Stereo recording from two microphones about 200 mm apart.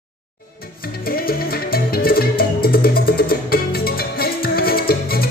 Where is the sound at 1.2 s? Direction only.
50° left (ahead or behind).